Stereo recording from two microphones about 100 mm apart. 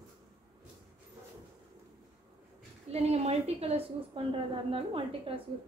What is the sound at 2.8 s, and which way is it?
Speech, 90° right.